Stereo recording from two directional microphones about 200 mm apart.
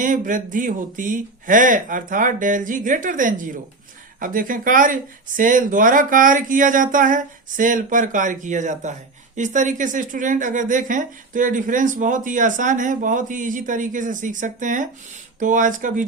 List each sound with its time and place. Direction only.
0.0 s speech: 40° right (ahead or behind)